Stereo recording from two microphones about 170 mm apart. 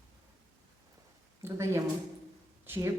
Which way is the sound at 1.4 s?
15° right (ahead or behind).